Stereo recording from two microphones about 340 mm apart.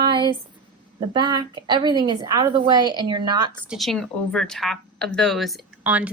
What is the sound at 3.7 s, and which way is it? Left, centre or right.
Speech, centre.